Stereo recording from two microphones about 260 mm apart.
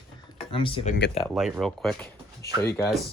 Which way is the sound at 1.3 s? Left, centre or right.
Centre.